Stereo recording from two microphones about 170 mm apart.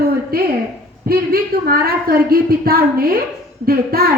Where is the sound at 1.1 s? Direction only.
65° right (ahead or behind).